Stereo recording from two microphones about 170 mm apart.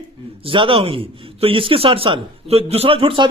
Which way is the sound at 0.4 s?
30° right (ahead or behind).